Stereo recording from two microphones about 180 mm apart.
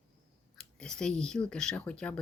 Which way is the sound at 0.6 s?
5° left (ahead or behind).